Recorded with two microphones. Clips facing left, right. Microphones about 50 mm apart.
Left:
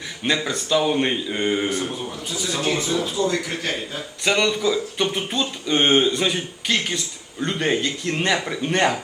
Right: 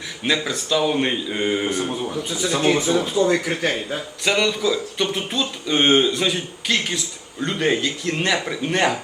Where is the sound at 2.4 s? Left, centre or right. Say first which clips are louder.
Right 4 dB; right.